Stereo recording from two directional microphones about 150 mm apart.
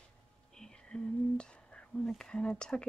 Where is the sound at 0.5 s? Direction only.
5° left (ahead or behind).